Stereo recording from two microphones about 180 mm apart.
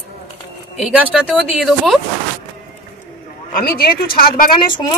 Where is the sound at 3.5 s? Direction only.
55° left (ahead or behind).